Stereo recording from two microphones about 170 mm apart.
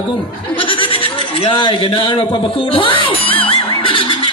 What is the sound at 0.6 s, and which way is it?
Speech, 30° left (ahead or behind).